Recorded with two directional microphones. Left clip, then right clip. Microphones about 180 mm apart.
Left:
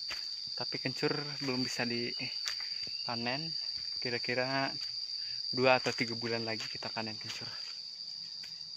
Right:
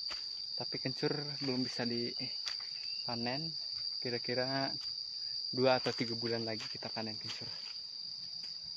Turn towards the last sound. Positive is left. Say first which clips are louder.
# left 2 dB
turn(degrees=5)  # may be behind; listen again after turning